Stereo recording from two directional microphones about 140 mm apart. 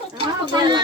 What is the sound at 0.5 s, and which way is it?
Speech, 30° right (ahead or behind).